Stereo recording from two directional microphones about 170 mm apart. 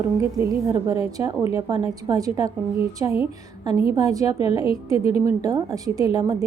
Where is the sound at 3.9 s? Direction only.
20° right (ahead or behind).